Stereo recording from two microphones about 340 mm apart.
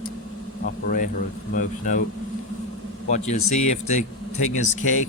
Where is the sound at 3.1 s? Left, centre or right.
Centre.